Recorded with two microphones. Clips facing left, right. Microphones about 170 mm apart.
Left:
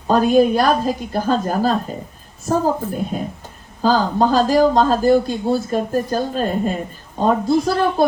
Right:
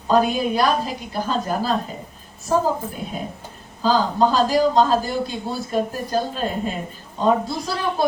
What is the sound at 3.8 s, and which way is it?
Speech, 45° left (ahead or behind).